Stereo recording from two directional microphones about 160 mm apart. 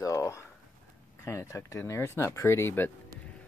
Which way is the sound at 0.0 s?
20° left (ahead or behind).